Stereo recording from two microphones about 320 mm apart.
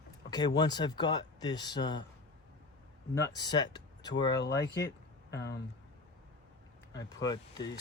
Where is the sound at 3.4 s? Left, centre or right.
Centre.